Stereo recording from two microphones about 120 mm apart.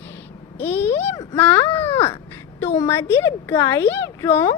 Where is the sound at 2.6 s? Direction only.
60° left (ahead or behind).